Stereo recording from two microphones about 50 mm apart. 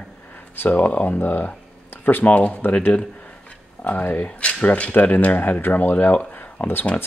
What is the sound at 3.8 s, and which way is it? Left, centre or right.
Speech, left.